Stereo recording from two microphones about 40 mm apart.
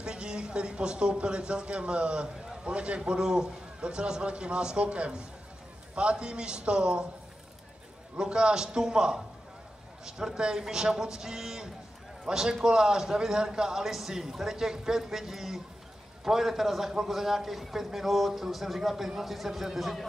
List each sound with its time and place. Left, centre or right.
0.0 s speech: right
8.2 s a man's voice: right; by 20.1 s centre